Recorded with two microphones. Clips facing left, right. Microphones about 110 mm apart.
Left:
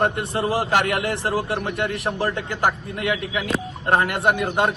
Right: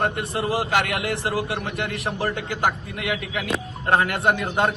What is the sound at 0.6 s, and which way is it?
A man's voice, 45° left (ahead or behind).